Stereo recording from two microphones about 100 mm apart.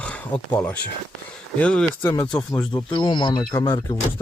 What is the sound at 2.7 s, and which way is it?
Speech, 55° left (ahead or behind).